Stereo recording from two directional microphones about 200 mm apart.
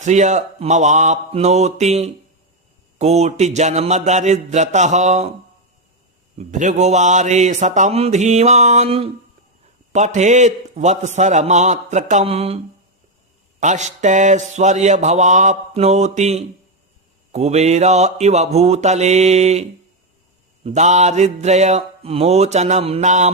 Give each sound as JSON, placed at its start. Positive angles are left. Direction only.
{"t": 0.0, "sound": "speech", "side_deg": -35}
{"t": 6.3, "sound": "speech", "side_deg": -40}
{"t": 13.6, "sound": "speech", "side_deg": -35}
{"t": 20.7, "sound": "speech", "side_deg": -35}